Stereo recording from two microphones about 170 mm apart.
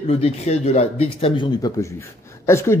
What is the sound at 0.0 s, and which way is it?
Speech, 35° left (ahead or behind).